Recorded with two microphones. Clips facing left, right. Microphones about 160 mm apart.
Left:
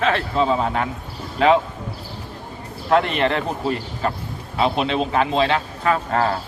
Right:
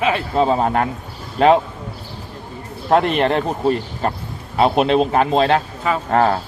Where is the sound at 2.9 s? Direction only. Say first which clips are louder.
Right 3 dB; 45° right (ahead or behind).